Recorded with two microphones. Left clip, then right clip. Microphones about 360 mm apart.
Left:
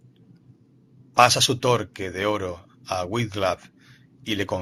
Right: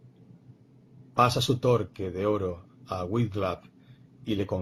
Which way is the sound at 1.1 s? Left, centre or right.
Left.